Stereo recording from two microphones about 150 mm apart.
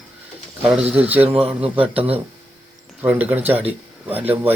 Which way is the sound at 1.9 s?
40° right (ahead or behind).